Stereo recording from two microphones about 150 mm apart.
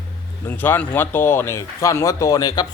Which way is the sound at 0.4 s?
15° left (ahead or behind).